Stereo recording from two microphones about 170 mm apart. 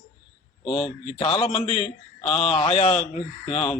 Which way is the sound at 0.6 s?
35° left (ahead or behind).